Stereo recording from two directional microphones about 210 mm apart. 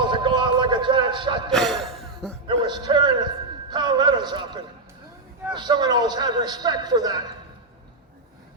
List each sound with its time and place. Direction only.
0.1 s a sound: 20° right (ahead or behind)
1.5 s music: centre (ahead or behind)
2.6 s a man's voice: 20° right (ahead or behind)